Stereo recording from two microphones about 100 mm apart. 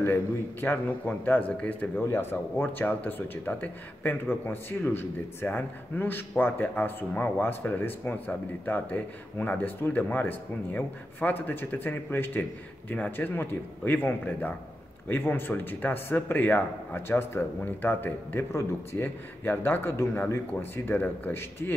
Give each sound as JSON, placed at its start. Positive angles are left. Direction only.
{"t": 0.0, "sound": "a man's voice", "side_deg": 20}